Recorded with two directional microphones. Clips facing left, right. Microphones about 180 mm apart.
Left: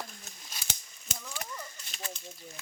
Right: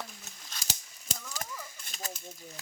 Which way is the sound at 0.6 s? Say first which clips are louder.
Right 5 dB; 40° right (ahead or behind).